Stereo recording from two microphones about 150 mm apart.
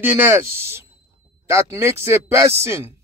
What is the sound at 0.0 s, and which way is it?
A man's voice, 15° right (ahead or behind).